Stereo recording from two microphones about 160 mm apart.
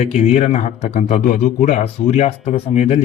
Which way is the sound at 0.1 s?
45° left (ahead or behind).